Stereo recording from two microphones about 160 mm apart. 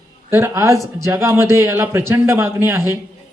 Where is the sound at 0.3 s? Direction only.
15° right (ahead or behind).